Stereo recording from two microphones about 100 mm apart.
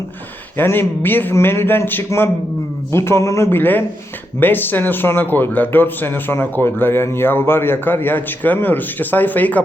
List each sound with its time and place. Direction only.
0.5 s speech: 20° left (ahead or behind)